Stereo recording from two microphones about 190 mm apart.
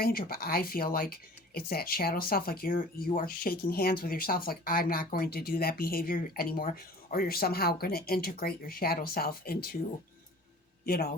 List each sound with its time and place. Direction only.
0.0 s speech: 50° left (ahead or behind)
10.8 s speech: 50° left (ahead or behind)